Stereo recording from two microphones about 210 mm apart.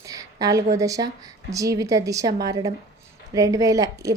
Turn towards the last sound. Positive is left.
turn(degrees=-15)  # may be behind; listen again after turning